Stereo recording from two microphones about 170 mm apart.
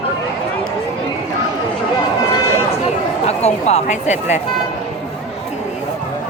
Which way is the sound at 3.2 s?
40° left (ahead or behind).